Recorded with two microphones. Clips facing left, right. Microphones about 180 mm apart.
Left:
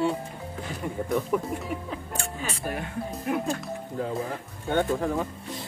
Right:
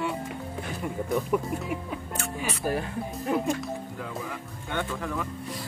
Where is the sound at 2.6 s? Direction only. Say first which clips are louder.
Right 5 dB; 35° right (ahead or behind).